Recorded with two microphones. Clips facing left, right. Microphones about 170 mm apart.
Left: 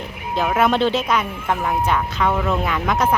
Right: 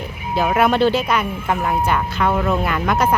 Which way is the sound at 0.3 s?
5° right (ahead or behind).